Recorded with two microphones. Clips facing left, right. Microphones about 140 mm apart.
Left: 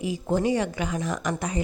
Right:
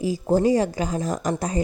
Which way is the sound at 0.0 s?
35° right (ahead or behind).